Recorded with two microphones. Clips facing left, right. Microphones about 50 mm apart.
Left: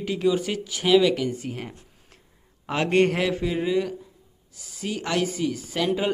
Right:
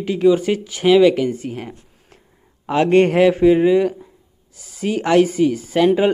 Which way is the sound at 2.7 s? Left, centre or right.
Centre.